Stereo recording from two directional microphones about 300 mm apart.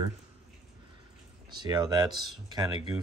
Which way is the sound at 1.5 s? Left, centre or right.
Centre.